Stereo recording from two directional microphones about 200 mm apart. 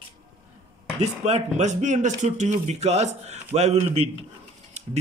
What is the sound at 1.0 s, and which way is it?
Speech, 35° right (ahead or behind).